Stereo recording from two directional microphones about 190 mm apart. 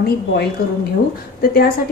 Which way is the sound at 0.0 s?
55° left (ahead or behind).